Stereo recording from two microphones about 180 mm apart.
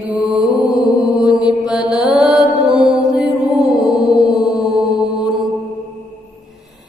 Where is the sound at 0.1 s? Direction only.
5° right (ahead or behind).